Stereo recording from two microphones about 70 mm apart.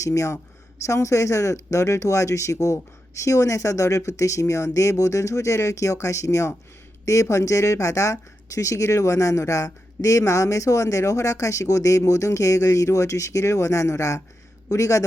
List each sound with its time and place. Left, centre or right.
0.0 s speech: left